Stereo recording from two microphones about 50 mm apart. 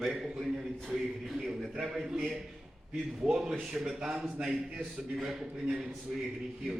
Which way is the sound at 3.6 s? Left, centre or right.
Centre.